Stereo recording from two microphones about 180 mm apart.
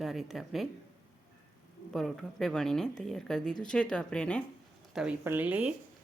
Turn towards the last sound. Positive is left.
turn(degrees=-10)  # may be behind; listen again after turning